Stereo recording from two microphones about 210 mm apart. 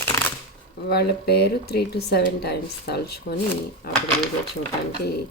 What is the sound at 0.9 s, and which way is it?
Speech, 50° left (ahead or behind).